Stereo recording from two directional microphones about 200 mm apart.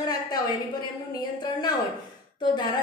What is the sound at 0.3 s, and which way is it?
Speech, 20° left (ahead or behind).